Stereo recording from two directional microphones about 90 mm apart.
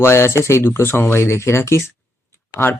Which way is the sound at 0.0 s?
30° left (ahead or behind).